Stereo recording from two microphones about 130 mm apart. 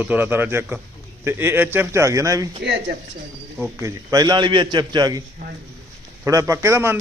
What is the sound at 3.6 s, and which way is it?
A man's voice, 25° right (ahead or behind).